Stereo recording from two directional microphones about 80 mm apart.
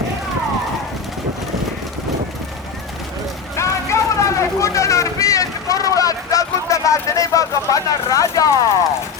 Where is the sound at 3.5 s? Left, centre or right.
Left.